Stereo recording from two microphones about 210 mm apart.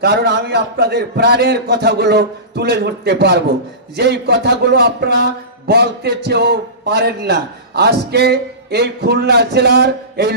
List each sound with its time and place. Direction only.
0.0 s speech: 50° right (ahead or behind)